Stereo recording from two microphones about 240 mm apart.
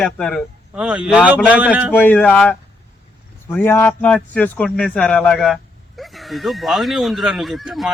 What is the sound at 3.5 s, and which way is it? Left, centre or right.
A man's voice, centre.